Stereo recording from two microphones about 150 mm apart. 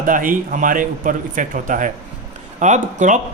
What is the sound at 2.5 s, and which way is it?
Speech, 55° right (ahead or behind).